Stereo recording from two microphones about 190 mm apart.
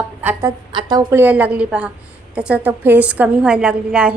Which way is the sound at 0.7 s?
20° right (ahead or behind).